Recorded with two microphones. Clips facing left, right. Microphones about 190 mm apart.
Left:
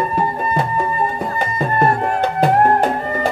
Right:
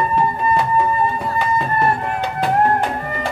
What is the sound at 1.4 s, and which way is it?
Music, 45° left (ahead or behind).